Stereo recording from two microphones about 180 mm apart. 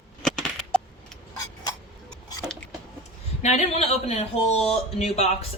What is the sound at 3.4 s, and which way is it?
Speech, 35° left (ahead or behind).